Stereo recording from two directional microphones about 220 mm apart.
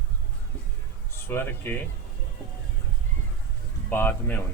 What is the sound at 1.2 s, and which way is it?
Speech, 10° left (ahead or behind).